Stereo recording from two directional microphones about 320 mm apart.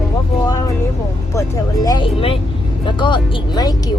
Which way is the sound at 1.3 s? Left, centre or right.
Centre.